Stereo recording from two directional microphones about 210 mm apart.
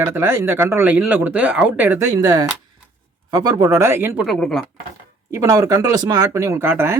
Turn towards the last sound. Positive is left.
turn(degrees=-10)  # may be behind; listen again after turning